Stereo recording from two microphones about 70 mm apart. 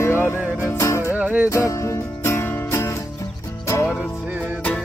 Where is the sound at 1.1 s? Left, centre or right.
Right.